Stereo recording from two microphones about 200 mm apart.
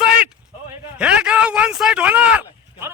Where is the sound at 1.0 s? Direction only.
5° right (ahead or behind).